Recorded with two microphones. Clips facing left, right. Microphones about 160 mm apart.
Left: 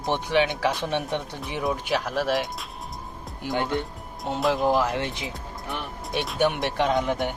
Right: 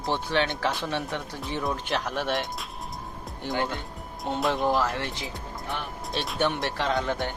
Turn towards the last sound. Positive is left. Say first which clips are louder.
# left 4 dB
turn(degrees=15)  # may be behind; listen again after turning